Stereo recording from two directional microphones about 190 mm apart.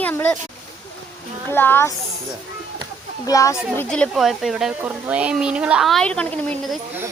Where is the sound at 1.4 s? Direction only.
10° left (ahead or behind).